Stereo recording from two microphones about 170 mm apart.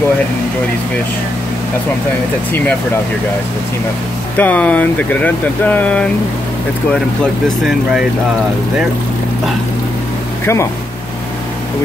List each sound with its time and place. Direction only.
4.4 s speech: 10° left (ahead or behind)
7.4 s speech: centre (ahead or behind)
10.4 s speech: 15° left (ahead or behind)